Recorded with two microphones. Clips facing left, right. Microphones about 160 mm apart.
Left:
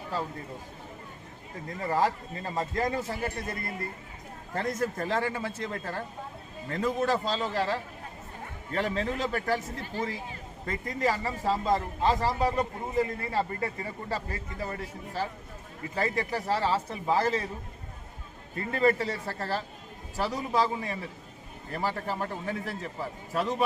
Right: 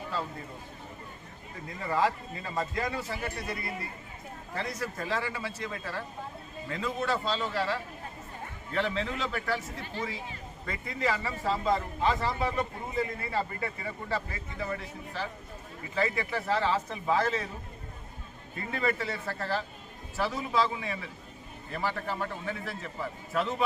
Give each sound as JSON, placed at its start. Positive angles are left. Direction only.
{"t": 1.6, "sound": "a man's voice", "side_deg": 40}
{"t": 18.5, "sound": "a man's voice", "side_deg": 40}